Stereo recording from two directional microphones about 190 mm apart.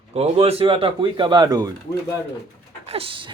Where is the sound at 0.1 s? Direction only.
35° right (ahead or behind).